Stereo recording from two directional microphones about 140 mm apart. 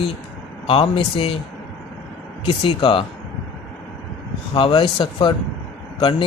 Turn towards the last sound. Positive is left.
turn(degrees=35)  # may be behind; listen again after turning